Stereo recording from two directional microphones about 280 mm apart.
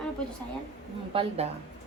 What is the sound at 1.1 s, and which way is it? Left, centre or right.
Speech, centre.